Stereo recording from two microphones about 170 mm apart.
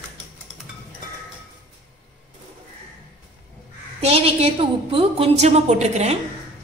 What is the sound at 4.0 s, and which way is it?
A woman's voice, 35° right (ahead or behind).